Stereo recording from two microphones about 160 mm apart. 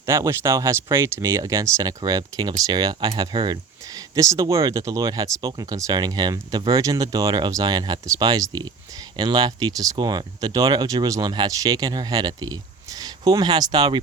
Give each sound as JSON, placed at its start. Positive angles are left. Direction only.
{"t": 0.0, "sound": "speech", "side_deg": -20}